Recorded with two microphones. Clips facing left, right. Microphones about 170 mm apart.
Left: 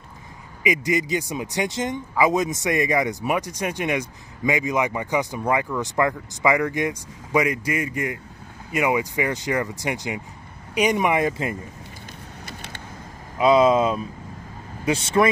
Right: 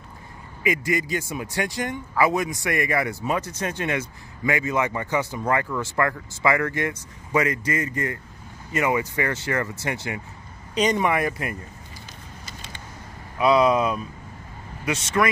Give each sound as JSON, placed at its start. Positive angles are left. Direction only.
{"t": 0.7, "sound": "speech", "side_deg": 20}
{"t": 13.4, "sound": "speech", "side_deg": 20}